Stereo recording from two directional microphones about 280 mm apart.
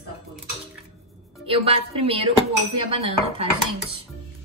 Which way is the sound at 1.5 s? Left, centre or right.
Right.